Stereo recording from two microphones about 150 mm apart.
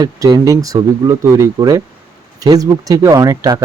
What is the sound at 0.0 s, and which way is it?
Speech, 25° right (ahead or behind).